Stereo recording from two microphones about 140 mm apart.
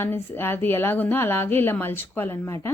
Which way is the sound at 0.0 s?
15° left (ahead or behind).